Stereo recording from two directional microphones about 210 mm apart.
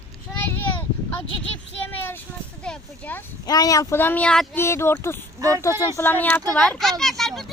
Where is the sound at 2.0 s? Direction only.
10° left (ahead or behind).